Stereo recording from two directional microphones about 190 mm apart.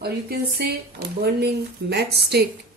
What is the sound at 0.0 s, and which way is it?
A woman's voice, 55° right (ahead or behind).